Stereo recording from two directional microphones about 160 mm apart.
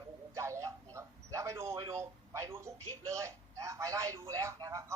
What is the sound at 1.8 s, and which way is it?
A man's voice, 20° right (ahead or behind).